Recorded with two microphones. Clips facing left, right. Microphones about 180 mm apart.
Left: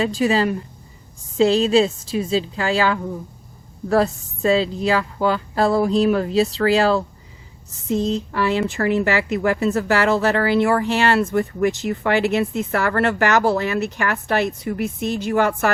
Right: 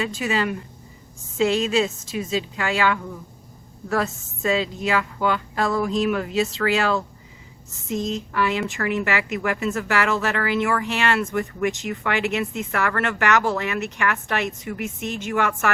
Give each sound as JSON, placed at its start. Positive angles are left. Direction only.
{"t": 0.0, "sound": "speech", "side_deg": 35}